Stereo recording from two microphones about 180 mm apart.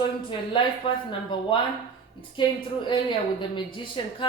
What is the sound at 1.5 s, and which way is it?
Speech, 25° left (ahead or behind).